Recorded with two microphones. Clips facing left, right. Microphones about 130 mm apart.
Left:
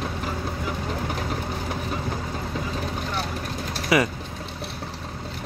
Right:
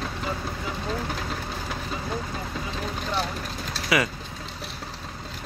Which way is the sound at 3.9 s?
25° left (ahead or behind).